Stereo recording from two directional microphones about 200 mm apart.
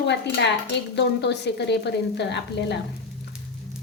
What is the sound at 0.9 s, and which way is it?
A woman's voice, 60° left (ahead or behind).